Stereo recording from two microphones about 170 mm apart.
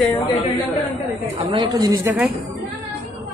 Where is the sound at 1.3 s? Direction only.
25° right (ahead or behind).